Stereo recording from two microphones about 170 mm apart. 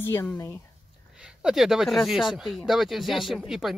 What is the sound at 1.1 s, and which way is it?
Speech, 5° right (ahead or behind).